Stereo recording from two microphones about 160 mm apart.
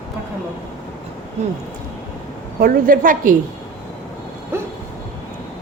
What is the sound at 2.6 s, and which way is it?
Speech, 65° right (ahead or behind).